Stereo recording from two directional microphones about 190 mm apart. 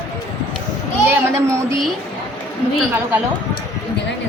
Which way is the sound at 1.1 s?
15° right (ahead or behind).